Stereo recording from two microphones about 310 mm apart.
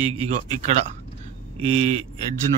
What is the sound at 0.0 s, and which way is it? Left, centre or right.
Speech, right.